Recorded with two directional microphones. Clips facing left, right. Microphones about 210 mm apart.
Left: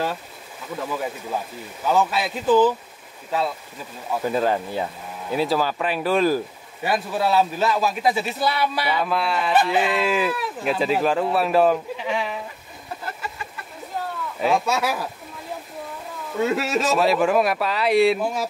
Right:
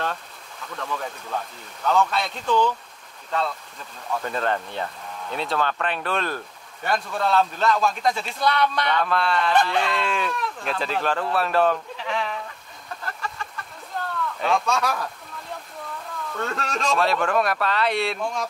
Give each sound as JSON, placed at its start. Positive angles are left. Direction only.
{"t": 0.0, "sound": "speech", "side_deg": 5}
{"t": 13.0, "sound": "chicken", "side_deg": 5}
{"t": 13.9, "sound": "a sound", "side_deg": 5}
{"t": 16.3, "sound": "speech", "side_deg": 5}